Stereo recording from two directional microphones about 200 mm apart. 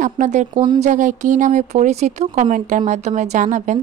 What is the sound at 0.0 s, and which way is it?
Speech, 35° right (ahead or behind).